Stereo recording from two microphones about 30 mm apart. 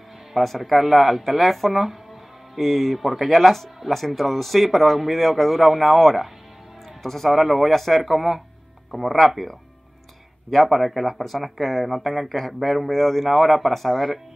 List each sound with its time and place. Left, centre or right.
0.3 s speech: centre
7.0 s speech: centre
7.3 s speech: centre
8.0 s speech: centre
8.9 s speech: centre
10.5 s speech: centre